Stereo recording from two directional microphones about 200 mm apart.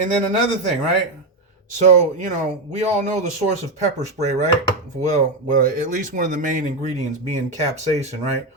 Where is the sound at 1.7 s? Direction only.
35° right (ahead or behind).